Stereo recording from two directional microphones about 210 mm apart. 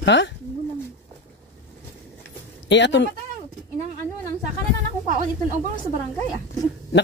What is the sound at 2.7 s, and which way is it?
Speech, 55° left (ahead or behind).